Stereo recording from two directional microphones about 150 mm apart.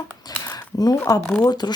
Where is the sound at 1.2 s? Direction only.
5° left (ahead or behind).